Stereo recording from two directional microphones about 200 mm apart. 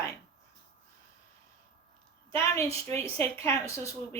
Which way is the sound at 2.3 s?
15° left (ahead or behind).